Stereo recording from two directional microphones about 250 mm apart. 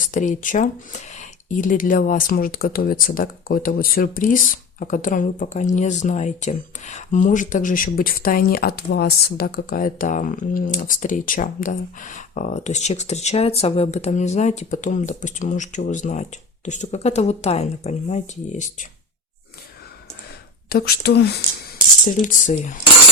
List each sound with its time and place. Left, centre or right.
0.1 s speech: left
20.7 s speech: left